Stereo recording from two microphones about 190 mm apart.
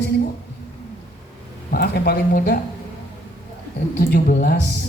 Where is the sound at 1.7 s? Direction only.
55° left (ahead or behind).